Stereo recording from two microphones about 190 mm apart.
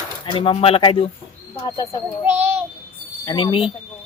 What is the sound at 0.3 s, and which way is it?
Speech, 25° left (ahead or behind).